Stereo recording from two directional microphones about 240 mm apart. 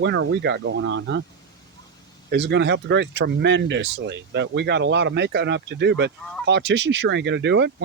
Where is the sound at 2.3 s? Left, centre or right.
Right.